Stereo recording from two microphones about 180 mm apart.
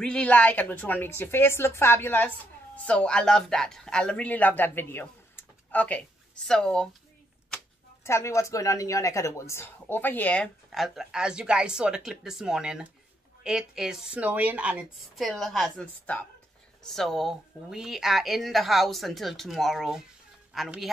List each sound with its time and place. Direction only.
0.0 s a woman's voice: 5° left (ahead or behind)
8.0 s a woman's voice: 15° left (ahead or behind); by 20.9 s centre (ahead or behind)